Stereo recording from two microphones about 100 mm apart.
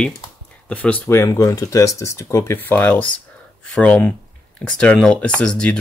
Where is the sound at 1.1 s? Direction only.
30° left (ahead or behind).